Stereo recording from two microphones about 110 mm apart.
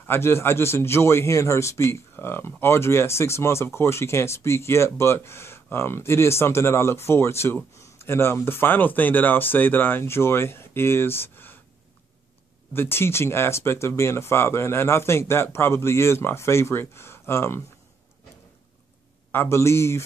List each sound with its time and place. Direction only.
0.0 s a man's voice: 20° left (ahead or behind)
12.7 s a man's voice: 20° left (ahead or behind)
19.3 s a man's voice: 25° left (ahead or behind)